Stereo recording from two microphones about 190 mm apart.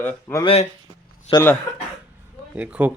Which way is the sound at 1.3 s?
15° left (ahead or behind).